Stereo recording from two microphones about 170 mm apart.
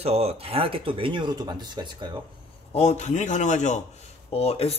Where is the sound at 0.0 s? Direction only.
35° right (ahead or behind).